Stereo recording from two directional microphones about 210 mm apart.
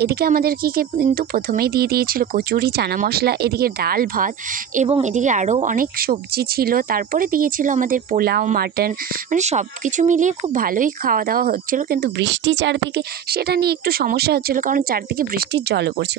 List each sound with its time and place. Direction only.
0.0 s speech: 45° right (ahead or behind)